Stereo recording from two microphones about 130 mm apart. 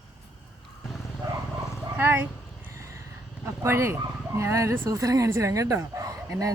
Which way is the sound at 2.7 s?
20° right (ahead or behind).